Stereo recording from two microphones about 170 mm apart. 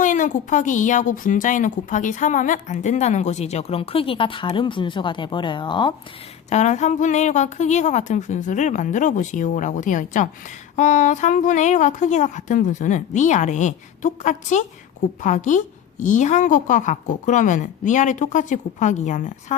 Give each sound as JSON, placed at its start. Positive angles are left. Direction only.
{"t": 0.0, "sound": "a woman's voice", "side_deg": 50}
{"t": 6.5, "sound": "a woman's voice", "side_deg": 45}